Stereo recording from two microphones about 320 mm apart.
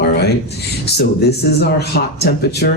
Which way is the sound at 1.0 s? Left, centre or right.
Left.